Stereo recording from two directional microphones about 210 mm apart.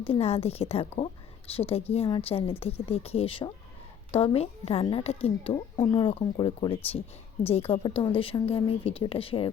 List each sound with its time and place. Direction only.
0.0 s a woman's voice: 25° left (ahead or behind)